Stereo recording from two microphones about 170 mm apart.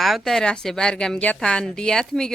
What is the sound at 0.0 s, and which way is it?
A woman's voice, centre (ahead or behind).